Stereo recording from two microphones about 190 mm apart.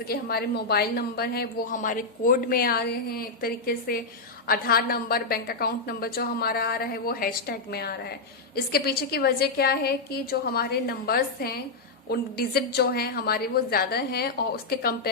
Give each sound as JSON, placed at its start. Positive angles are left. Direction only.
{"t": 0.1, "sound": "a woman's voice", "side_deg": 55}